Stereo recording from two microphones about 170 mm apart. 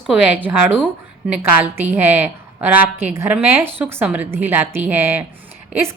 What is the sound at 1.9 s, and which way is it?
A woman's voice, 10° right (ahead or behind).